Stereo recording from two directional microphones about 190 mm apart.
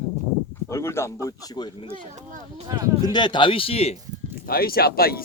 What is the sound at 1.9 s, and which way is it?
Speech, 45° right (ahead or behind).